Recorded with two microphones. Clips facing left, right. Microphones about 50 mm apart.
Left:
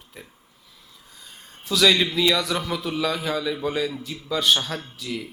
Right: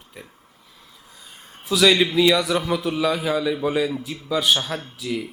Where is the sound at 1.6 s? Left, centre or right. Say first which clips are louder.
Right 2 dB; centre.